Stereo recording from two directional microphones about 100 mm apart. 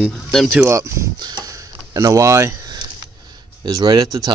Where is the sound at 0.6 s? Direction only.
30° right (ahead or behind).